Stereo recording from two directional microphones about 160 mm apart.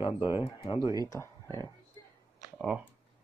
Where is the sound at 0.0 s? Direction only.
30° left (ahead or behind).